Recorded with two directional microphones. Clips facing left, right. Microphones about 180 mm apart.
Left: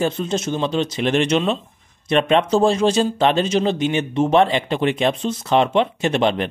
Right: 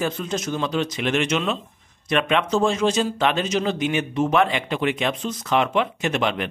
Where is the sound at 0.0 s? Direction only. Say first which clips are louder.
Left 4 dB; 30° left (ahead or behind).